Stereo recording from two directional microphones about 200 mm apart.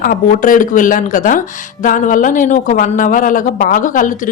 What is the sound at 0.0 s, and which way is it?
Speech, 45° left (ahead or behind).